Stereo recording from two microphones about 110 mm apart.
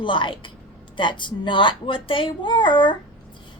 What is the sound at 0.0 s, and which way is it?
Speech, 50° left (ahead or behind).